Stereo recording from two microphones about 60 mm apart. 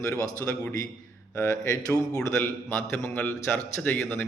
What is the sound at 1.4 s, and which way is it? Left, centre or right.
Speech, left.